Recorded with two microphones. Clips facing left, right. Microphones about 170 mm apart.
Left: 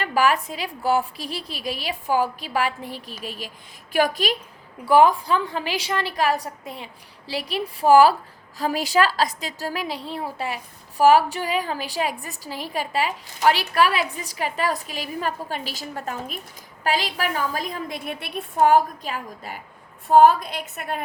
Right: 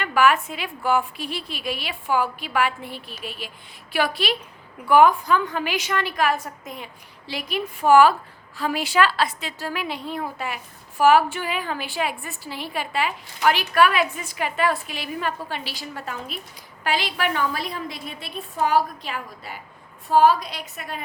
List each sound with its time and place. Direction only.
0.0 s a sound: 35° left (ahead or behind)
0.4 s a woman's voice: 35° left (ahead or behind)
4.9 s a woman's voice: 30° left (ahead or behind); by 21.0 s 50° left (ahead or behind)